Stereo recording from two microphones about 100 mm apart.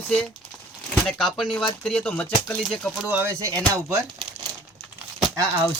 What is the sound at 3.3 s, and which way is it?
Speech, 30° right (ahead or behind).